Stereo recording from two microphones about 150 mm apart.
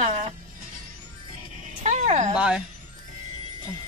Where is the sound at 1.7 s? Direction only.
55° right (ahead or behind).